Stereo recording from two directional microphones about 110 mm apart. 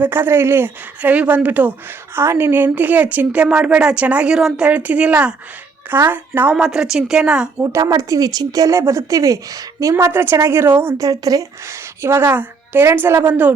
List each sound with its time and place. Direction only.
0.0 s speech: 20° right (ahead or behind)
6.6 s speech: 5° right (ahead or behind)
7.6 s a woman's voice: 25° right (ahead or behind)
9.9 s a woman's voice: 20° right (ahead or behind)
12.0 s a woman's voice: 20° right (ahead or behind)